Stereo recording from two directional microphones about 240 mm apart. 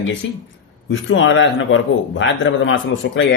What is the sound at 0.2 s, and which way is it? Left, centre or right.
A man's voice, left.